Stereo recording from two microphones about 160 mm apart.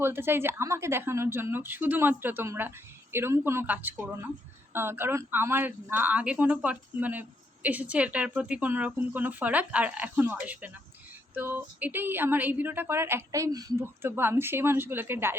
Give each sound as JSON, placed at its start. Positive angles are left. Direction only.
{"t": 0.0, "sound": "speech", "side_deg": -15}